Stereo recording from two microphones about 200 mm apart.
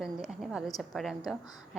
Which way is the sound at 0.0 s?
Centre (ahead or behind).